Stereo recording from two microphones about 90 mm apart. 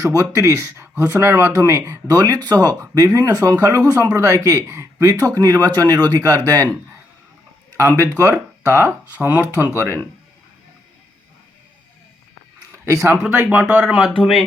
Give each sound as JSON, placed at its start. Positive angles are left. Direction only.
{"t": 0.0, "sound": "speech", "side_deg": -40}
{"t": 8.1, "sound": "speech", "side_deg": -30}
{"t": 9.1, "sound": "speech", "side_deg": -15}
{"t": 9.7, "sound": "speech", "side_deg": -30}
{"t": 12.7, "sound": "speech", "side_deg": -35}
{"t": 13.2, "sound": "speech", "side_deg": -20}
{"t": 14.2, "sound": "speech", "side_deg": 5}